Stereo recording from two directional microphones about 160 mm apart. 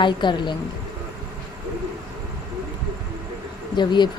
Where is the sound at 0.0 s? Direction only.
30° left (ahead or behind).